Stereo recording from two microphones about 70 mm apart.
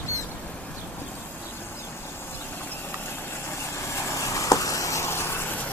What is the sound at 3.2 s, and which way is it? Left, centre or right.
Vehicle, left.